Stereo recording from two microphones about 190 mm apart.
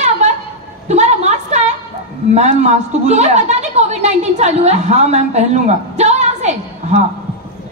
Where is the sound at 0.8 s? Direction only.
35° right (ahead or behind).